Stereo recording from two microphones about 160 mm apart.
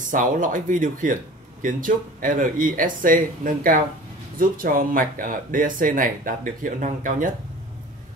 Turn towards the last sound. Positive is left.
turn(degrees=-55)  # may be behind; listen again after turning